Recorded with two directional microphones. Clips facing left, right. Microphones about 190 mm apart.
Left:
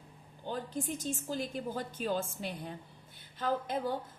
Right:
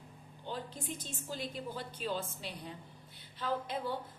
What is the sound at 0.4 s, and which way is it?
A woman's voice, 45° left (ahead or behind).